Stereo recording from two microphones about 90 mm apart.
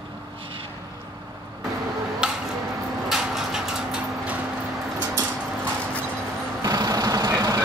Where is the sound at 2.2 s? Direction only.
10° right (ahead or behind).